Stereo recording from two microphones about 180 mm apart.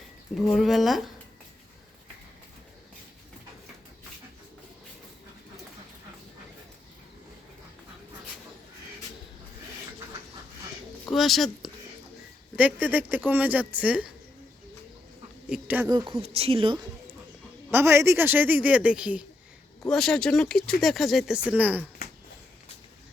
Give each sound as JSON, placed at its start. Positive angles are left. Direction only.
{"t": 0.3, "sound": "speech", "side_deg": 0}
{"t": 11.1, "sound": "a woman's voice", "side_deg": 0}
{"t": 15.4, "sound": "speech", "side_deg": -5}
{"t": 15.9, "sound": "speech", "side_deg": -20}
{"t": 17.7, "sound": "a woman's voice", "side_deg": -15}